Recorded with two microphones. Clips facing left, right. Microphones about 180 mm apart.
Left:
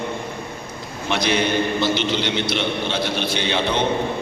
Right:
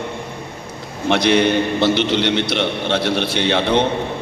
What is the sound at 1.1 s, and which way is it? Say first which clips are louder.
A man's voice: right 5 dB; 65° right (ahead or behind).